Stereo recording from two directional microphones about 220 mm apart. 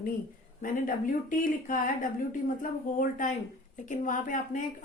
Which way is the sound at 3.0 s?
35° left (ahead or behind).